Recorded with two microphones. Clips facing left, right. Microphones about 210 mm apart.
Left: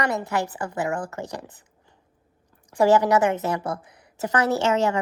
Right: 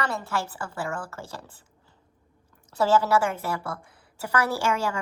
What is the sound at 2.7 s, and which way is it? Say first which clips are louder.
A woman's voice: left 4 dB; 15° left (ahead or behind).